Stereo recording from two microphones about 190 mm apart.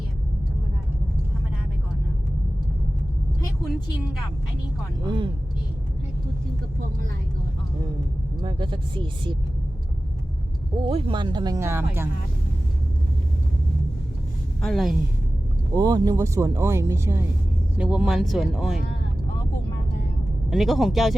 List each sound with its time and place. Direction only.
5.0 s speech: 25° right (ahead or behind)
8.4 s speech: 25° right (ahead or behind)
10.8 s speech: 25° right (ahead or behind); by 12.0 s 10° right (ahead or behind)
14.6 s speech: centre (ahead or behind)
15.7 s speech: 20° right (ahead or behind); by 18.8 s centre (ahead or behind)
20.5 s speech: centre (ahead or behind)